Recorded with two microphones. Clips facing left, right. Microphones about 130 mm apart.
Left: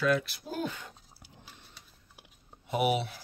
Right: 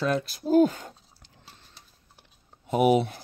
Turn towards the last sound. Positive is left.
turn(degrees=-45)  # may be behind; listen again after turning